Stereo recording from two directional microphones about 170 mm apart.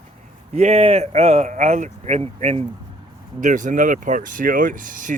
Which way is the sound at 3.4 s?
50° right (ahead or behind).